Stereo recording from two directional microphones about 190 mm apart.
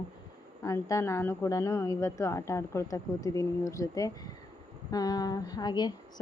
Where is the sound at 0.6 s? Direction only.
15° left (ahead or behind).